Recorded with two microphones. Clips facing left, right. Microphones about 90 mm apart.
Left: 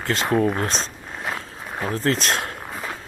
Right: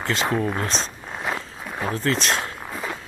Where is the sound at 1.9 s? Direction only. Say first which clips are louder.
Left 2 dB; 40° left (ahead or behind).